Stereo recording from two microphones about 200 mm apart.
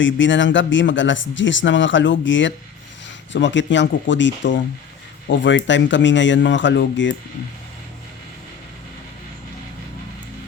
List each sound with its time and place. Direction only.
0.0 s speech: 65° left (ahead or behind)